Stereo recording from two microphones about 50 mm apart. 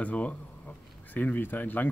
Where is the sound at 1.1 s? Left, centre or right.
Left.